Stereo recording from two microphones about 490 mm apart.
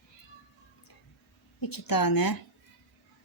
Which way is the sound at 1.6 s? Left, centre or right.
Left.